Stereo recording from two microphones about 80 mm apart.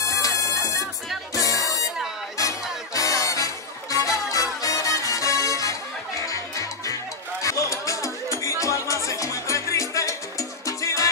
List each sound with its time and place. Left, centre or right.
0.0 s bagpipes: left
1.3 s music: left